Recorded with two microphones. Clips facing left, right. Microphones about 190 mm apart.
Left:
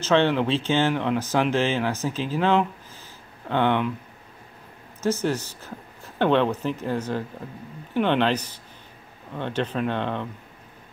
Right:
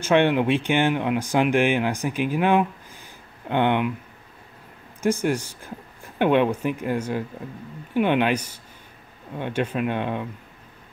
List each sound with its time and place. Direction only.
0.0 s speech: 15° right (ahead or behind)
5.0 s speech: 15° right (ahead or behind)